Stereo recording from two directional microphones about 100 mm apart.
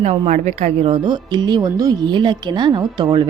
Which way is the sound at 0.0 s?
90° right.